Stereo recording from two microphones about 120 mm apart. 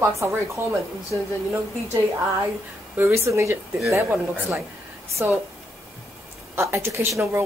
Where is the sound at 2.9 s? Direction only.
20° right (ahead or behind).